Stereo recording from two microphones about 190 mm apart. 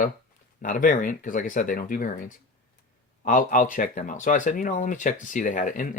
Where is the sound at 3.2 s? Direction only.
45° left (ahead or behind).